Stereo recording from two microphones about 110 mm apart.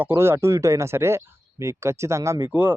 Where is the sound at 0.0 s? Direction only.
20° right (ahead or behind).